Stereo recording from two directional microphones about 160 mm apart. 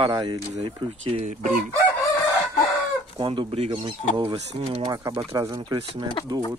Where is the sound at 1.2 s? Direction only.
50° right (ahead or behind).